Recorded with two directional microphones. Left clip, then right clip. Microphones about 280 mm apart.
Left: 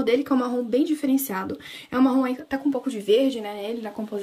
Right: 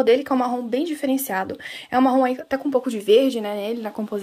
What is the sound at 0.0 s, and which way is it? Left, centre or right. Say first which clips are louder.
Speech: right 4 dB; centre.